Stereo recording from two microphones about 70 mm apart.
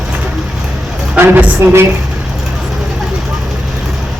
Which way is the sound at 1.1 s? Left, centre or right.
Right.